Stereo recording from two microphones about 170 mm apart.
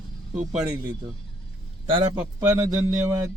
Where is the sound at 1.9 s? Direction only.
20° right (ahead or behind).